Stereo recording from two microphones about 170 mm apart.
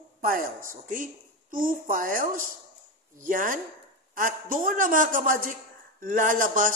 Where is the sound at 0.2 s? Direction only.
55° right (ahead or behind).